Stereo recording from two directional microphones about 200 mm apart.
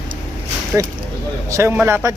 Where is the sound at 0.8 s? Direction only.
15° right (ahead or behind).